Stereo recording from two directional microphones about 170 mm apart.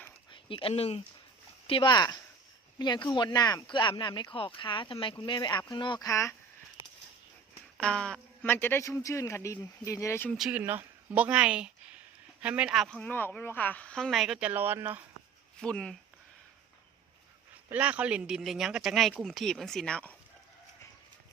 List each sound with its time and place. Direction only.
0.3 s speech: 30° left (ahead or behind)
7.8 s a man's voice: 5° left (ahead or behind)
10.3 s speech: 5° right (ahead or behind)
15.6 s speech: 5° left (ahead or behind)
17.7 s speech: 10° right (ahead or behind)